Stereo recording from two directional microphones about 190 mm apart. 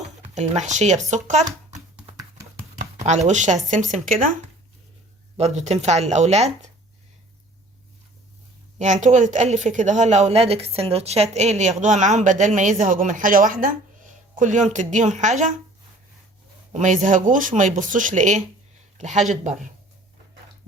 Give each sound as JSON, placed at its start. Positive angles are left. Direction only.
{"t": 0.2, "sound": "a woman's voice", "side_deg": -35}
{"t": 2.7, "sound": "speech", "side_deg": -35}
{"t": 5.4, "sound": "a woman's voice", "side_deg": -35}
{"t": 8.8, "sound": "a woman's voice", "side_deg": -40}
{"t": 16.7, "sound": "speech", "side_deg": -40}